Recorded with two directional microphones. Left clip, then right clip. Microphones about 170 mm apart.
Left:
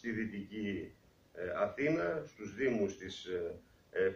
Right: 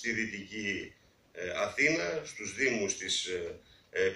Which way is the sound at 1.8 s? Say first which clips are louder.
Right 4 dB; 55° right (ahead or behind).